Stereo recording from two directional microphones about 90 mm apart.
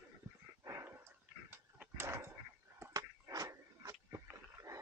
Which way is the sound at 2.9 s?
40° right (ahead or behind).